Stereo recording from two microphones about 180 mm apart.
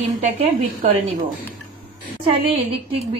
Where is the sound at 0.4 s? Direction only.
35° right (ahead or behind).